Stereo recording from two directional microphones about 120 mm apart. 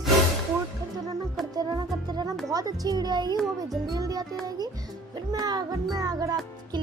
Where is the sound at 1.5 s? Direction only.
30° right (ahead or behind).